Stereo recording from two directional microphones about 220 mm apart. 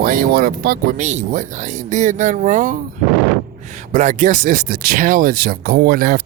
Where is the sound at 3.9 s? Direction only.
35° right (ahead or behind).